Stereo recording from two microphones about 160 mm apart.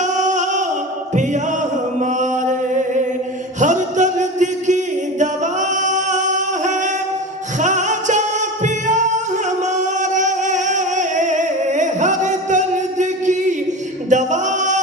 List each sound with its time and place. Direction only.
0.0 s music: 50° right (ahead or behind)
1.1 s choir: 50° right (ahead or behind)
2.0 s chant: 50° right (ahead or behind)
3.6 s a sound: 50° right (ahead or behind)
5.2 s singing: 50° right (ahead or behind)